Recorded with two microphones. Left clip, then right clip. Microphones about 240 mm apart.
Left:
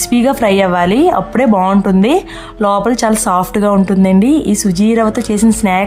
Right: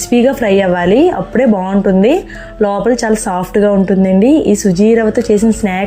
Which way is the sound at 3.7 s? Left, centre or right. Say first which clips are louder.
Right 1 dB; centre.